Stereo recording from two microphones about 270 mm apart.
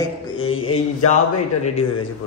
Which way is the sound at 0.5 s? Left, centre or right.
Left.